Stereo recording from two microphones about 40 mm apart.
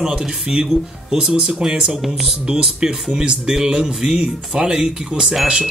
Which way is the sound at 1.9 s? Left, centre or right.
Centre.